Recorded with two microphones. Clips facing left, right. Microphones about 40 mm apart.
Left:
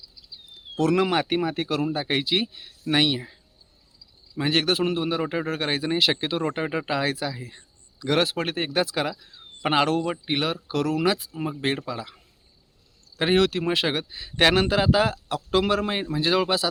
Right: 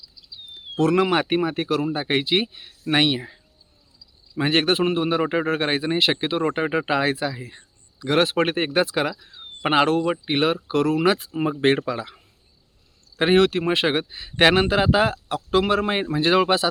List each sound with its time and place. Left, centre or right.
0.5 s a sound: right
1.1 s speech: right
1.6 s speech: centre
1.9 s speech: right
8.2 s speech: right
13.1 s speech: right
15.9 s speech: right